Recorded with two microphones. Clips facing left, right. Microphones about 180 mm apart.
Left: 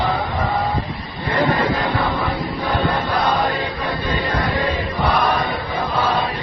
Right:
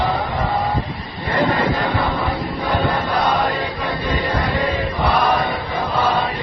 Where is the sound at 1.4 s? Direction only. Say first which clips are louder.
Even; 5° right (ahead or behind).